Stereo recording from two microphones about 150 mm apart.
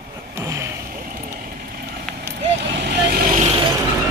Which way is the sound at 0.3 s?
20° right (ahead or behind).